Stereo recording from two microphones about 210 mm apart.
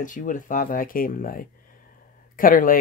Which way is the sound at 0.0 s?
40° left (ahead or behind).